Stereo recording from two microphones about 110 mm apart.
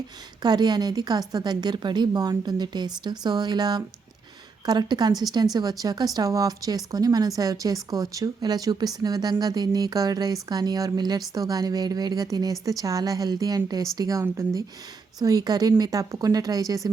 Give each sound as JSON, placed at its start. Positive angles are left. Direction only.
{"t": 0.4, "sound": "speech", "side_deg": -40}